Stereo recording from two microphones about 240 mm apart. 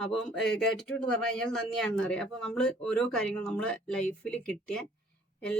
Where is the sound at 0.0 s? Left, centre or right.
Centre.